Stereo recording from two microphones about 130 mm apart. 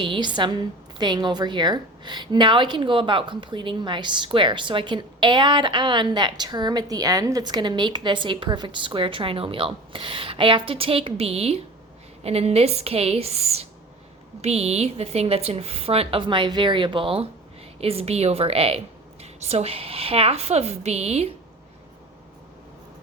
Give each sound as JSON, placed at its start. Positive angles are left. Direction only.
{"t": 0.0, "sound": "a woman's voice", "side_deg": -40}